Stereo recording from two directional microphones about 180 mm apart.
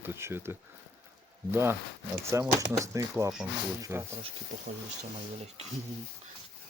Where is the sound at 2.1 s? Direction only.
15° right (ahead or behind).